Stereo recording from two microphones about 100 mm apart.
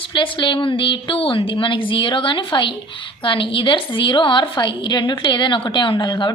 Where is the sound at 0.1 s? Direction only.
55° left (ahead or behind).